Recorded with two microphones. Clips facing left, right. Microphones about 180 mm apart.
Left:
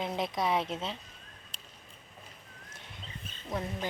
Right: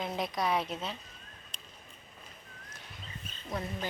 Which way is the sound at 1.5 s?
30° left (ahead or behind).